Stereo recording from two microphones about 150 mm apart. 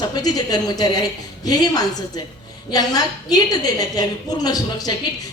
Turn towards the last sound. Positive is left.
turn(degrees=25)  # may be behind; listen again after turning